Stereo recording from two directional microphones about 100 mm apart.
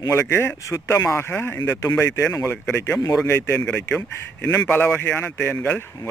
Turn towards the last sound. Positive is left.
turn(degrees=20)  # may be behind; listen again after turning